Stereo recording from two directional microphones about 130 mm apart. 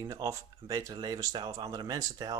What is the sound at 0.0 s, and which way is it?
Speech, 25° right (ahead or behind).